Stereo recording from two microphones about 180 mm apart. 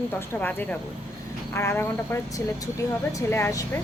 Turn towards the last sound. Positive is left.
turn(degrees=15)  # may be behind; listen again after turning